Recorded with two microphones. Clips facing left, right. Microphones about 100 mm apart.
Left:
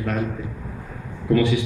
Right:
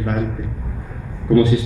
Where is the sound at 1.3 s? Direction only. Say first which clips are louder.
Right 5 dB; 25° right (ahead or behind).